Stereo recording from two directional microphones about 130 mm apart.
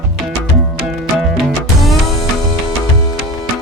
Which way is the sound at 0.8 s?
Centre (ahead or behind).